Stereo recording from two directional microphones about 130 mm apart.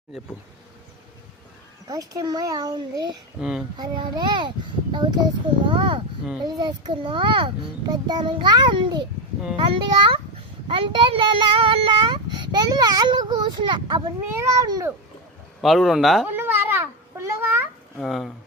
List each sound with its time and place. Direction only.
1.9 s a child's voice: 25° right (ahead or behind)
3.4 s speech: 5° right (ahead or behind)
3.8 s speech: 35° right (ahead or behind)
14.3 s a child's voice: 25° right (ahead or behind)
15.6 s speech: centre (ahead or behind)
16.2 s babbling: 15° right (ahead or behind)
17.9 s speech: centre (ahead or behind)